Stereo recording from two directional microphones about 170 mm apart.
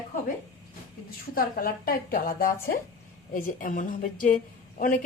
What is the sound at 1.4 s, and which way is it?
A woman's voice, 60° left (ahead or behind).